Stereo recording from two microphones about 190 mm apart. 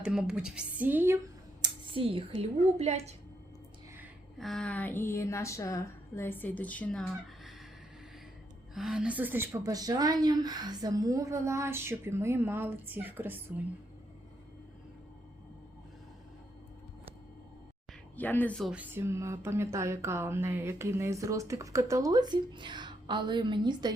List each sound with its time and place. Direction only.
0.0 s a woman's voice: 5° right (ahead or behind)
1.6 s speech: 30° right (ahead or behind)
4.4 s speech: centre (ahead or behind)
8.7 s speech: centre (ahead or behind)
18.2 s speech: 10° left (ahead or behind); by 23.9 s 25° right (ahead or behind)